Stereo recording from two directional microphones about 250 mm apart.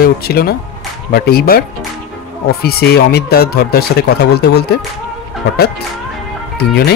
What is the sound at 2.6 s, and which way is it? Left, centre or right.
Speech, left.